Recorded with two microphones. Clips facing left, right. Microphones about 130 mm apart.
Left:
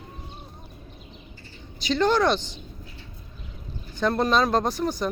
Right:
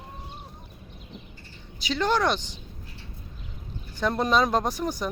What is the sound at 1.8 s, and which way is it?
Speech, 10° right (ahead or behind).